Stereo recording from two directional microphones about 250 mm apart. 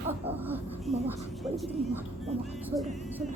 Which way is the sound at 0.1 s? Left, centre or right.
Centre.